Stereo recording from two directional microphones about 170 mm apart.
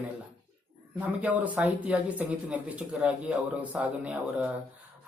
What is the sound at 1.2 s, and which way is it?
Speech, 10° right (ahead or behind).